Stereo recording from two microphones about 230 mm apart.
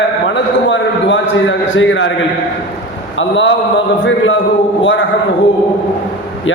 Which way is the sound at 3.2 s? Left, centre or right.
Left.